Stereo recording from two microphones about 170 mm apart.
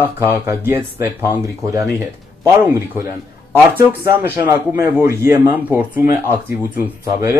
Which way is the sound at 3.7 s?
15° right (ahead or behind).